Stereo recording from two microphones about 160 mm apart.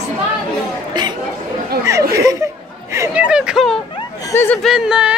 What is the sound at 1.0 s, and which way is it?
Chatter, 25° right (ahead or behind).